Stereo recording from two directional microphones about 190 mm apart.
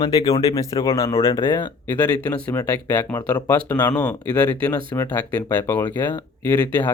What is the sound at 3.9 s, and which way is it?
Speech, 10° left (ahead or behind).